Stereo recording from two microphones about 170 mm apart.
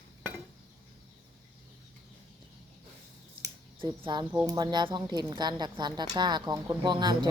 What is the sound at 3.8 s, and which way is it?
Speech, 30° right (ahead or behind).